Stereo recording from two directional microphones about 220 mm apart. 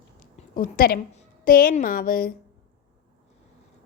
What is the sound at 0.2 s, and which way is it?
A woman's voice, 40° left (ahead or behind).